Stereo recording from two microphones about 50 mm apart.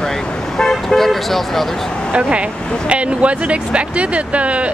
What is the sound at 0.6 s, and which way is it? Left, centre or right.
Car, centre.